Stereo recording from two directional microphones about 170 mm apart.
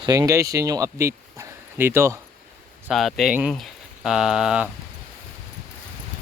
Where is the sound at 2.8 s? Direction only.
Centre (ahead or behind).